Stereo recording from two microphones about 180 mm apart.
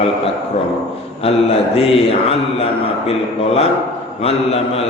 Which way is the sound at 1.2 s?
35° left (ahead or behind).